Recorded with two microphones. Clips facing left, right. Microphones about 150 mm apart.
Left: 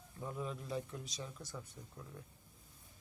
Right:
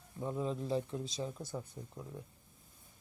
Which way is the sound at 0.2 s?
25° right (ahead or behind).